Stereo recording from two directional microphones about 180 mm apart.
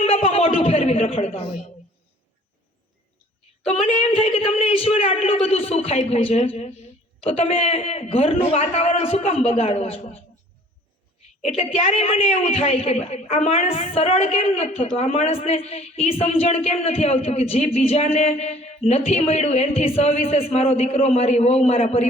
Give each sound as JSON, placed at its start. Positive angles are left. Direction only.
{"t": 0.0, "sound": "a sound", "side_deg": 30}
{"t": 3.6, "sound": "a man's voice", "side_deg": 35}
{"t": 11.4, "sound": "a man's voice", "side_deg": 35}